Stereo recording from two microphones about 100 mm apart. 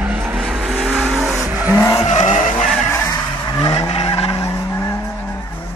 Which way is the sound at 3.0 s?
35° left (ahead or behind).